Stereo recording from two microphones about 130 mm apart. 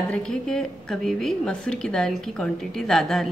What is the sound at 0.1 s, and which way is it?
A woman's voice, 5° left (ahead or behind).